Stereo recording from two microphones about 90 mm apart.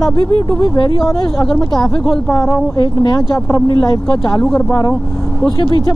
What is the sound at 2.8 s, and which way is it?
Speech, 55° left (ahead or behind).